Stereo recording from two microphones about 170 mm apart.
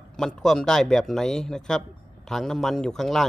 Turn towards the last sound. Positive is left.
turn(degrees=0)  # may be behind; listen again after turning